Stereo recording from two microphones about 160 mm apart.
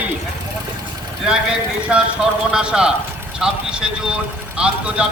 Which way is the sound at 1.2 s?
5° right (ahead or behind).